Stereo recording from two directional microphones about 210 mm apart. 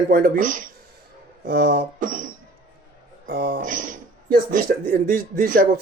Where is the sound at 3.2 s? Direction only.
50° right (ahead or behind).